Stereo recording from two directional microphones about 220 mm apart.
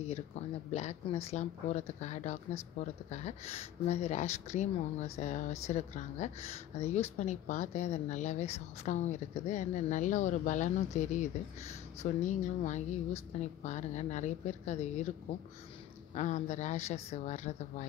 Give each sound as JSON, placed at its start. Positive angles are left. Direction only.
{"t": 0.0, "sound": "speech", "side_deg": 30}
{"t": 16.2, "sound": "speech", "side_deg": 30}